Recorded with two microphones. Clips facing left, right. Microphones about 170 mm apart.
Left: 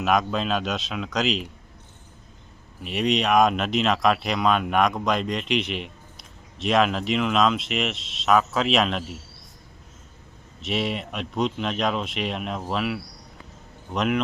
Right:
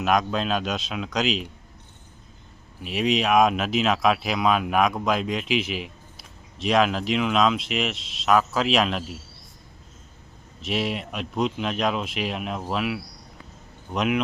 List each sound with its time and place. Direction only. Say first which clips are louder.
0.0 s speech: even; centre (ahead or behind)
2.8 s speech: even; centre (ahead or behind)
10.6 s speech: even; centre (ahead or behind)